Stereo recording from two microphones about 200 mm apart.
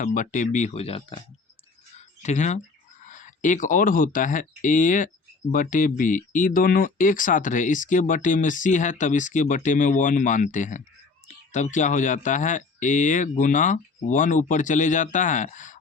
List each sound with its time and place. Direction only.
0.0 s speech: 40° left (ahead or behind)
2.0 s a sound: 35° left (ahead or behind)
3.0 s speech: 40° left (ahead or behind)